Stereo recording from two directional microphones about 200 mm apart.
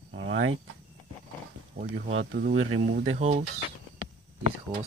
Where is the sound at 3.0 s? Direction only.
35° right (ahead or behind).